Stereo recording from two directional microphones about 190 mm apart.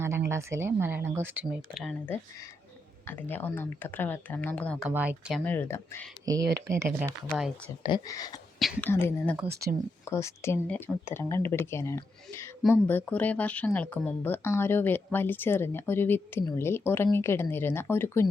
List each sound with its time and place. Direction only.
0.0 s speech: 15° right (ahead or behind); by 4.8 s 5° left (ahead or behind)
4.8 s speech: 10° right (ahead or behind)
5.5 s speech: 10° left (ahead or behind)
6.2 s speech: 20° right (ahead or behind)
7.3 s speech: 5° right (ahead or behind)
7.9 s speech: 20° left (ahead or behind)
8.5 s whispering: centre (ahead or behind)
8.9 s speech: 10° left (ahead or behind)